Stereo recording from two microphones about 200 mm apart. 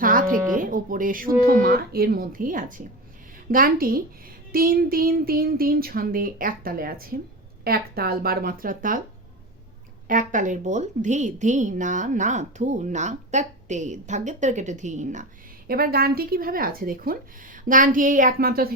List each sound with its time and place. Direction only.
0.0 s speech: 45° right (ahead or behind)
10.1 s a woman's voice: 40° right (ahead or behind)